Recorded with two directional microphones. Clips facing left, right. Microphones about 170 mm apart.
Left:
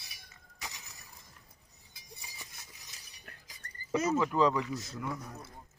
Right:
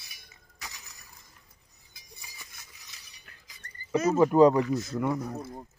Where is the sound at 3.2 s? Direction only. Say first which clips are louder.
Left 2 dB; 40° left (ahead or behind).